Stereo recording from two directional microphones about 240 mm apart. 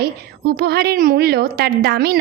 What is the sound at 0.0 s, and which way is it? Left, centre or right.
A woman's voice, right.